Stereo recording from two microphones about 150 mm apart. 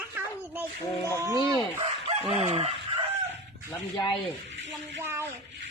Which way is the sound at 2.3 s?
45° right (ahead or behind).